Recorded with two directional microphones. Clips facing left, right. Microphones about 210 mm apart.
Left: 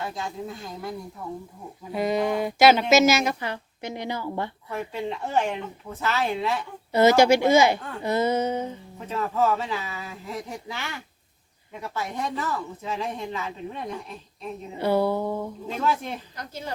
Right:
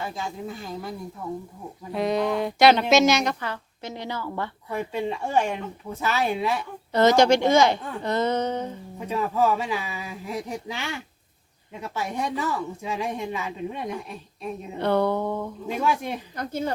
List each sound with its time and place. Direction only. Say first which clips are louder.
0.0 s speech: even; centre (ahead or behind)
3.4 s a woman's voice: left 1 dB; 15° left (ahead or behind)
4.7 s speech: right 4 dB; 15° right (ahead or behind)
6.9 s a woman's voice: even; 10° left (ahead or behind)
9.0 s speech: right 1 dB; 15° right (ahead or behind)
14.8 s a woman's voice: even; 5° left (ahead or behind)
15.6 s speech: right 2 dB; 15° right (ahead or behind)
16.3 s speech: right 7 dB; 55° right (ahead or behind)